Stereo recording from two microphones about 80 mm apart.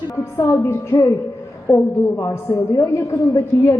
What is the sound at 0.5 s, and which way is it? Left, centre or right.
A woman's voice, left.